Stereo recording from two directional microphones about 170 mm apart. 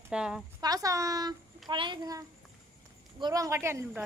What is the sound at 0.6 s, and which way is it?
A child's voice, 20° right (ahead or behind).